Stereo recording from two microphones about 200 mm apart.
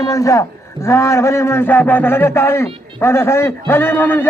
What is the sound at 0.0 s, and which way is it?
A man's voice, 15° left (ahead or behind).